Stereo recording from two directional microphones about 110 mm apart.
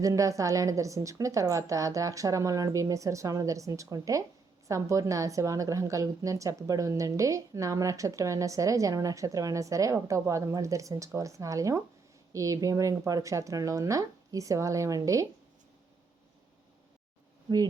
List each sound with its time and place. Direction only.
0.0 s a woman's voice: 30° right (ahead or behind)